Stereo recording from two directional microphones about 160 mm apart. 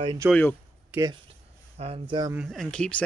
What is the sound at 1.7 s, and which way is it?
Speech, 40° right (ahead or behind).